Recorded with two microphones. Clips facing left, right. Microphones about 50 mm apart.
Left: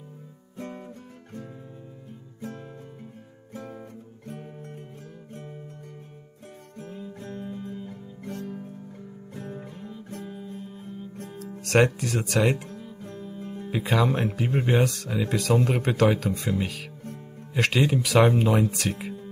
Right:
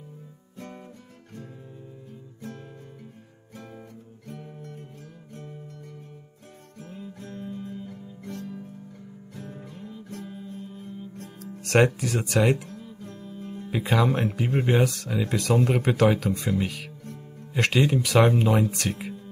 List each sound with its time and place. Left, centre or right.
0.6 s music: left
2.4 s music: left
4.3 s music: left
7.2 s music: left
11.6 s speech: centre
12.5 s music: left
13.7 s speech: centre
17.0 s music: left
17.6 s speech: centre